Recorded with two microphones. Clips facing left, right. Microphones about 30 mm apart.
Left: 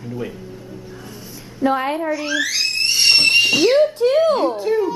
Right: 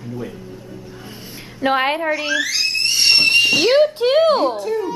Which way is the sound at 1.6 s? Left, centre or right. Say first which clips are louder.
Right 1 dB; right.